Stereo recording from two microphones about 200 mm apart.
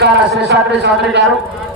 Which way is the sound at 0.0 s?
60° right (ahead or behind).